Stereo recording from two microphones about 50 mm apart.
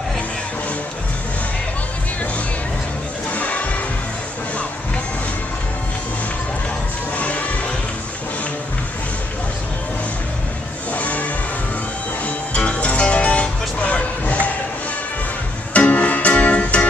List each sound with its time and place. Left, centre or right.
3.3 s music: left
7.2 s music: left
10.9 s vehicle: left
12.3 s music: left
15.7 s music: left